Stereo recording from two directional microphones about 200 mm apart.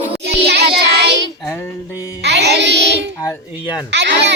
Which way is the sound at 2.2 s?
55° right (ahead or behind).